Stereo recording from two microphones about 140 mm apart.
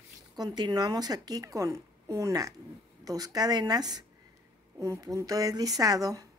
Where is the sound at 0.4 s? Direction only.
30° right (ahead or behind).